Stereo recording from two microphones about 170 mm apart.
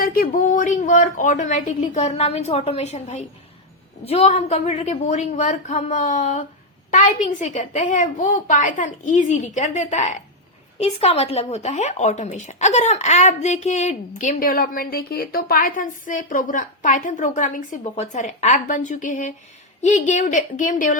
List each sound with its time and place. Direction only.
0.0 s a woman's voice: 60° left (ahead or behind)